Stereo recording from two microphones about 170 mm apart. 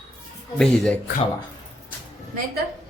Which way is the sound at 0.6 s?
5° left (ahead or behind).